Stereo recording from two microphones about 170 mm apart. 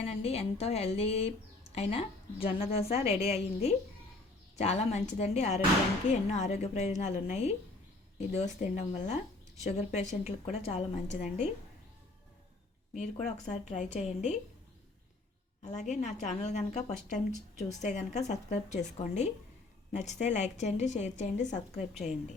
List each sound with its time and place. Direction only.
0.0 s a woman's voice: 35° left (ahead or behind)
12.9 s a woman's voice: 45° left (ahead or behind)
15.6 s a woman's voice: 45° left (ahead or behind)